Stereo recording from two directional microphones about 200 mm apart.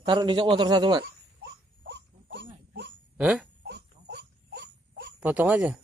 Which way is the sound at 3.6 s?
55° right (ahead or behind).